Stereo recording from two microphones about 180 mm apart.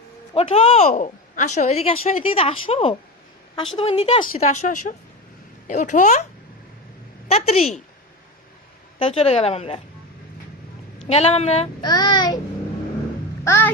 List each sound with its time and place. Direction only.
0.3 s a woman's voice: 35° left (ahead or behind)
7.3 s a woman's voice: 35° left (ahead or behind)
9.0 s a woman's voice: 30° left (ahead or behind)
11.1 s a woman's voice: 35° left (ahead or behind)
11.8 s child singing: 20° left (ahead or behind)
13.4 s a sound: 15° left (ahead or behind)